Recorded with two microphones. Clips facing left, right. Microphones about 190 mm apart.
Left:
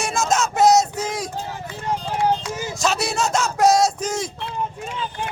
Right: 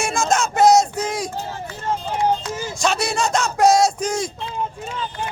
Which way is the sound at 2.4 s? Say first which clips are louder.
Even; 15° left (ahead or behind).